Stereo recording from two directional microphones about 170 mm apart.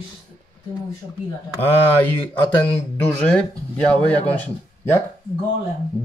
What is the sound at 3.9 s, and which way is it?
Speech, 10° left (ahead or behind).